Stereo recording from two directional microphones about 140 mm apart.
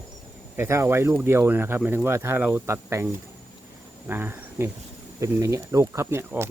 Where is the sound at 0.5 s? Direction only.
15° right (ahead or behind).